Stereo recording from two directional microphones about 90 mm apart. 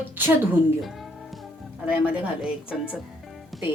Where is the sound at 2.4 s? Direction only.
5° right (ahead or behind).